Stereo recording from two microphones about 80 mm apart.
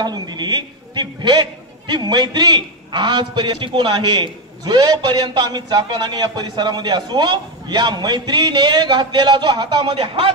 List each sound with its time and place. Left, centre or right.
0.0 s a man's voice: right